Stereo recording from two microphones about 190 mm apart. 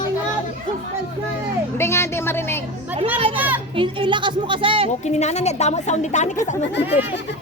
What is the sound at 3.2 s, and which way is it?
Children playing, 30° right (ahead or behind).